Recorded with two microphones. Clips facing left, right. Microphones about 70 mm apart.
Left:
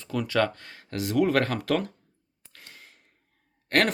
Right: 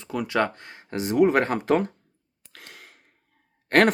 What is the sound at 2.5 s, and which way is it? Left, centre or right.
Sigh, right.